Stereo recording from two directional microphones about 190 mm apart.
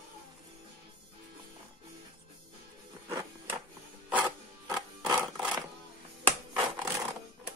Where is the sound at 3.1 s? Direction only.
15° right (ahead or behind).